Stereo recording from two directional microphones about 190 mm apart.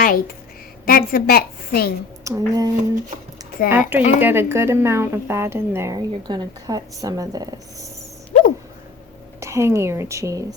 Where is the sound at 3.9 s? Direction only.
10° right (ahead or behind).